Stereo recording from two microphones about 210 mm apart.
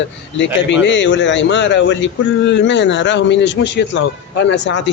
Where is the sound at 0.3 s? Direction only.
60° left (ahead or behind).